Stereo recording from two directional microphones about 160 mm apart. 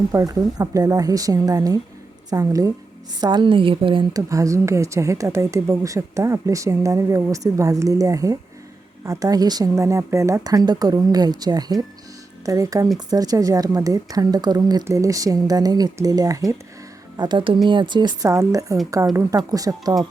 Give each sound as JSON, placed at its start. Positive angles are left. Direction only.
{"t": 0.1, "sound": "a woman's voice", "side_deg": -20}
{"t": 4.3, "sound": "speech", "side_deg": -20}